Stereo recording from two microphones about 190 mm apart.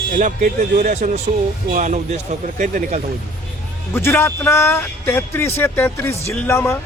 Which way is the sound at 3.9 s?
15° left (ahead or behind).